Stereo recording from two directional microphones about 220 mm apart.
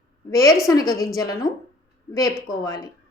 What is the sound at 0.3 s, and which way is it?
A woman's voice, 15° left (ahead or behind).